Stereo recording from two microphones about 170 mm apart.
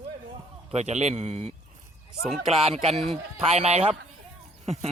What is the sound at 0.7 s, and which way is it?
Speech, 40° right (ahead or behind).